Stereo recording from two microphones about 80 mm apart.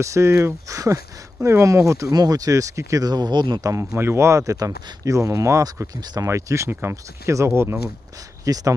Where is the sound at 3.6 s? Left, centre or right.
Right.